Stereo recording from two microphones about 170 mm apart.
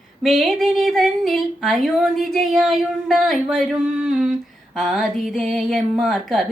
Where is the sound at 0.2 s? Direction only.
Centre (ahead or behind).